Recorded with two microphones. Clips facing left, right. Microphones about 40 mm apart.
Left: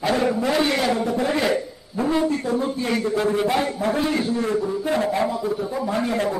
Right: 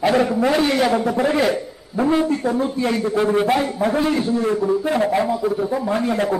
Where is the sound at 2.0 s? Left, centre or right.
Right.